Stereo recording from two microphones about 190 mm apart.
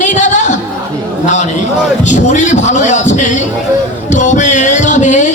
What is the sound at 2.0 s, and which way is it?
A man's voice, 40° left (ahead or behind).